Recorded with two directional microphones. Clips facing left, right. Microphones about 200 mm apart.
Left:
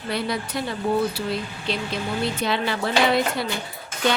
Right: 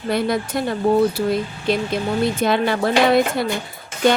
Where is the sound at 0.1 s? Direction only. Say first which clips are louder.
Right 6 dB; 50° right (ahead or behind).